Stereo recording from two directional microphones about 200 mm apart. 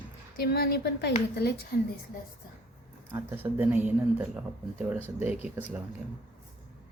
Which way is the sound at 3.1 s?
10° right (ahead or behind).